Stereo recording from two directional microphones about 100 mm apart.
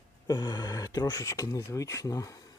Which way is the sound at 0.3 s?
45° left (ahead or behind).